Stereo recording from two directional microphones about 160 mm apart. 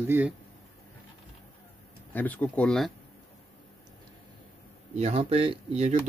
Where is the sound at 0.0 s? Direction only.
15° right (ahead or behind).